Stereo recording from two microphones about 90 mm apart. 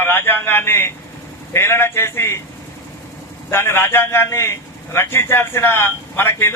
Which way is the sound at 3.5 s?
25° left (ahead or behind).